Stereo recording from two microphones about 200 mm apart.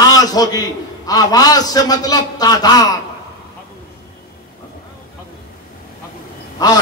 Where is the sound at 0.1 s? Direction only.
20° left (ahead or behind).